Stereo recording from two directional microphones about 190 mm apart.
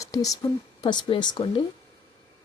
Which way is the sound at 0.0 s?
20° left (ahead or behind).